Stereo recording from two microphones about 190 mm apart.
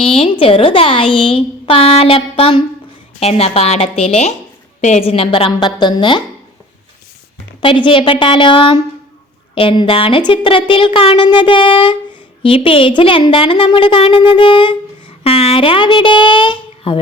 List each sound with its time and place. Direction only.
0.0 s speech: 30° left (ahead or behind)
7.6 s speech: 25° left (ahead or behind)